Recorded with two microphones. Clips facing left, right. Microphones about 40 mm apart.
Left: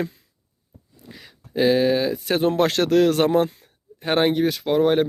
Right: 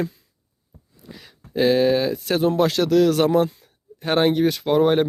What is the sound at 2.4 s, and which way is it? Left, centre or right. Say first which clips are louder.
Speech: right 1 dB; left.